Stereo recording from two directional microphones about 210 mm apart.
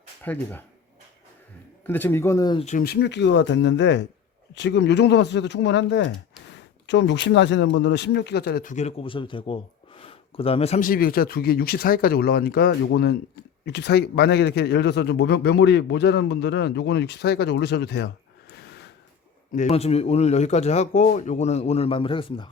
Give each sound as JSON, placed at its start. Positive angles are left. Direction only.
{"t": 0.3, "sound": "speech", "side_deg": 5}
{"t": 1.9, "sound": "speech", "side_deg": 10}
{"t": 2.6, "sound": "speech", "side_deg": 45}
{"t": 19.5, "sound": "speech", "side_deg": 30}